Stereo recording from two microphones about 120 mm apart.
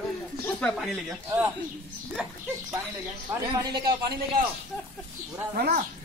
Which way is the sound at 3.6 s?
35° right (ahead or behind).